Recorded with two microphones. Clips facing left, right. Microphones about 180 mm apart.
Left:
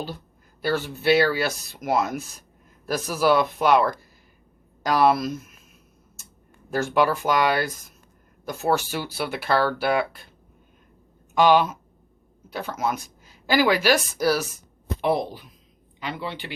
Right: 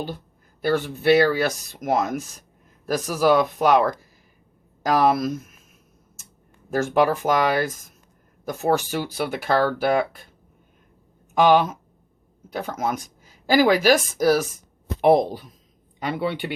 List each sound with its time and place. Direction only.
0.6 s speech: 50° right (ahead or behind)
6.7 s speech: 45° right (ahead or behind)
11.4 s speech: 50° right (ahead or behind)
16.1 s speech: 60° right (ahead or behind)